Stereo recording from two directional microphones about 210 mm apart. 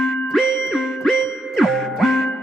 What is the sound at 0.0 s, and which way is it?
Music, centre (ahead or behind).